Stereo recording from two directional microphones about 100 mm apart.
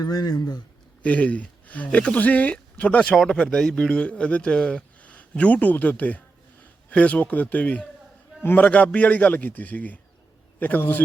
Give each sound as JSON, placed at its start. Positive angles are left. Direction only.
{"t": 0.0, "sound": "speech", "side_deg": 40}
{"t": 1.0, "sound": "a man's voice", "side_deg": 15}